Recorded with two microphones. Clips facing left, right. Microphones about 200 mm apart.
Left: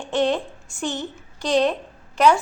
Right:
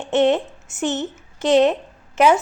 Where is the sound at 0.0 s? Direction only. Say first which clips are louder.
Right 4 dB; 25° right (ahead or behind).